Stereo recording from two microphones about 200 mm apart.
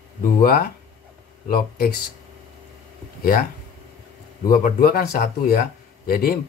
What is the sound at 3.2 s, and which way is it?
Speech, 45° left (ahead or behind).